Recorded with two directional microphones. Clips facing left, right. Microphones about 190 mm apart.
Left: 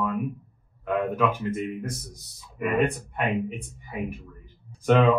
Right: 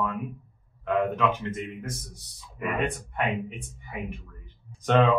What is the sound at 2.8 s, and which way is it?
Speech, centre (ahead or behind).